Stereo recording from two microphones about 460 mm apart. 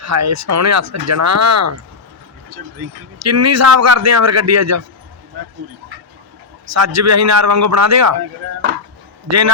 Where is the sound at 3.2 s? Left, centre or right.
Right.